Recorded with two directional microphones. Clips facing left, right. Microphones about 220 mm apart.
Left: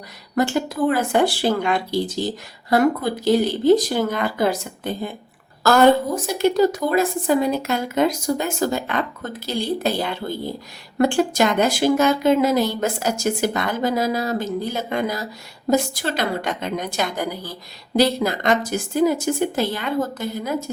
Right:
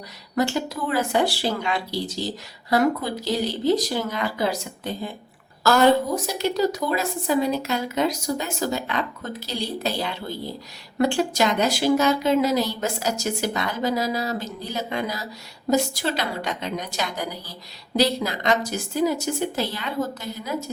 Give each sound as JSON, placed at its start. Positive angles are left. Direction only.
{"t": 0.3, "sound": "speech", "side_deg": 50}